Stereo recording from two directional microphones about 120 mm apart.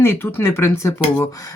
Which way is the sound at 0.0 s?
20° left (ahead or behind).